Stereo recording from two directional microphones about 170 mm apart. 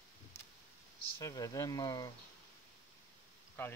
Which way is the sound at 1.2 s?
20° left (ahead or behind).